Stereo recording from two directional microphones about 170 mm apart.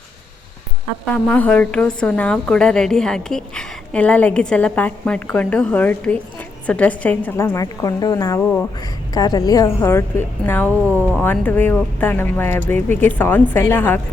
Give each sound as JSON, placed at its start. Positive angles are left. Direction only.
{"t": 1.1, "sound": "a woman's voice", "side_deg": 5}
{"t": 10.7, "sound": "speech", "side_deg": -15}
{"t": 11.1, "sound": "a woman's voice", "side_deg": 10}